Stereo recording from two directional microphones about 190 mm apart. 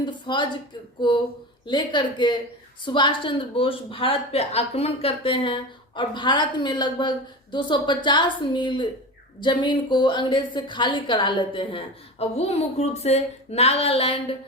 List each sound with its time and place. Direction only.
0.0 s speech: 25° left (ahead or behind)
1.6 s a woman's voice: 25° left (ahead or behind)